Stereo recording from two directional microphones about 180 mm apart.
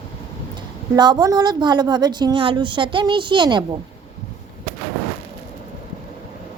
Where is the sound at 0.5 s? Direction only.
25° right (ahead or behind).